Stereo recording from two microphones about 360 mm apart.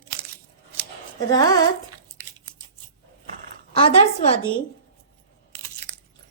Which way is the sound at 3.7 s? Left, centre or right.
Centre.